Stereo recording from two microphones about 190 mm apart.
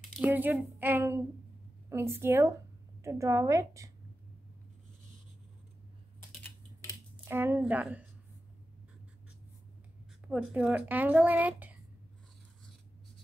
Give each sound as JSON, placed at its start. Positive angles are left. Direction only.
{"t": 0.2, "sound": "speech", "side_deg": -10}
{"t": 7.2, "sound": "speech", "side_deg": -10}
{"t": 10.2, "sound": "speech", "side_deg": -5}